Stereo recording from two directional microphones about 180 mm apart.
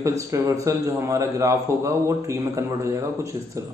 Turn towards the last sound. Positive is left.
turn(degrees=-15)  # may be behind; listen again after turning